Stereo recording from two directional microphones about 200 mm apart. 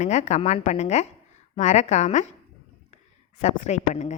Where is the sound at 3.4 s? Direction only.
35° left (ahead or behind).